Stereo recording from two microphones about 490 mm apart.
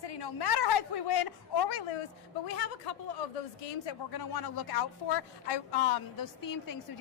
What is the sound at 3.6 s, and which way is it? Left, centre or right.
Speech, left.